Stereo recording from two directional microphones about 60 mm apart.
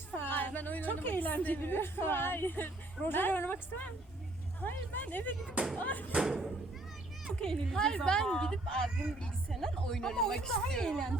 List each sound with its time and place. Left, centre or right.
0.2 s a woman's voice: left
6.1 s speech: centre
7.4 s speech: centre